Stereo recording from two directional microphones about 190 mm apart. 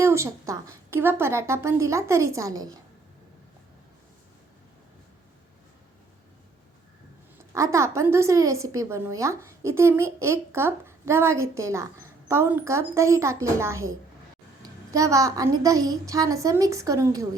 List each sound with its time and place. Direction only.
0.0 s a woman's voice: 15° right (ahead or behind)
7.5 s a woman's voice: 15° right (ahead or behind)